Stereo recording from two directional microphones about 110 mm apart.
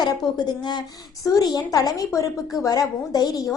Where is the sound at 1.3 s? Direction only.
35° left (ahead or behind).